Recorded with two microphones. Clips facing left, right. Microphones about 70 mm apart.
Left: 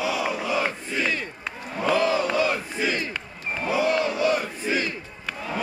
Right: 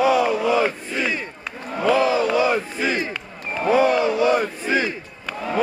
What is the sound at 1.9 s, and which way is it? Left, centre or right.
Crowd, right.